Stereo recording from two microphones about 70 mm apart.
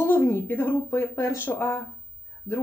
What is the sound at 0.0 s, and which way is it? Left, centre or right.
Speech, left.